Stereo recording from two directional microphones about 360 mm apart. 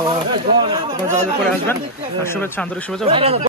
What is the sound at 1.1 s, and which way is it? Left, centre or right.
Speech, centre.